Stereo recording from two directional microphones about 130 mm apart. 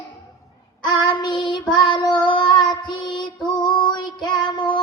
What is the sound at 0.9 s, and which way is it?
Child singing, 35° left (ahead or behind).